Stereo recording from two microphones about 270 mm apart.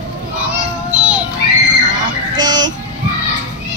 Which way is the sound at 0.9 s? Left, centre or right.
Centre.